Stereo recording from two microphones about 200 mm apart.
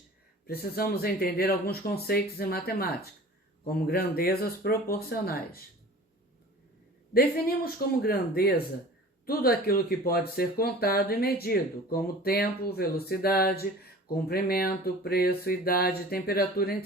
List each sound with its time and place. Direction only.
0.4 s speech: 50° left (ahead or behind)
7.1 s speech: 50° left (ahead or behind)